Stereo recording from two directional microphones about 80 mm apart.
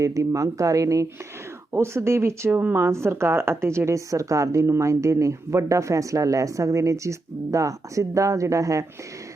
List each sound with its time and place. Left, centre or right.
0.0 s speech: right